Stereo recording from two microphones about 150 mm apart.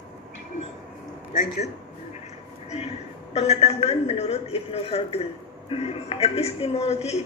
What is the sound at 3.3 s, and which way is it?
A woman's voice, 45° left (ahead or behind).